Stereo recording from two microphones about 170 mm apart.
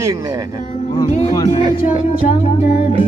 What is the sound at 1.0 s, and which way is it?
Music, 40° left (ahead or behind).